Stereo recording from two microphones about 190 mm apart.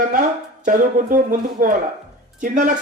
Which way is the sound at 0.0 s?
45° right (ahead or behind).